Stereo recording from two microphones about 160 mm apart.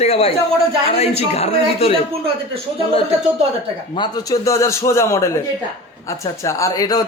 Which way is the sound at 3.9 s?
25° left (ahead or behind).